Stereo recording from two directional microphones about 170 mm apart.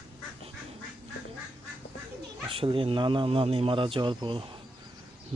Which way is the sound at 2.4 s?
30° right (ahead or behind).